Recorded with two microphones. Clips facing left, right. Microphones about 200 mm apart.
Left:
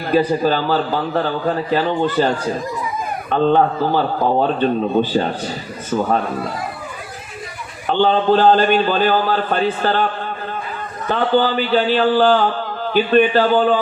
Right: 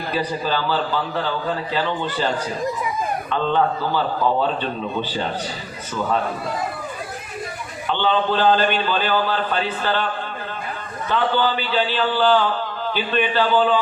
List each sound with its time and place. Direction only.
0.1 s speech: 45° left (ahead or behind)
7.9 s speech: 45° left (ahead or behind)
11.1 s speech: 45° left (ahead or behind)